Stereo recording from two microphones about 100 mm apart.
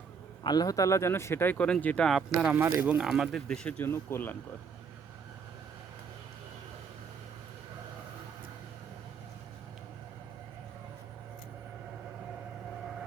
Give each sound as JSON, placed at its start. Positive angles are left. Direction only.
{"t": 0.4, "sound": "speech", "side_deg": 40}
{"t": 2.4, "sound": "speech", "side_deg": -15}
{"t": 3.0, "sound": "speech", "side_deg": 0}
{"t": 3.8, "sound": "speech", "side_deg": 25}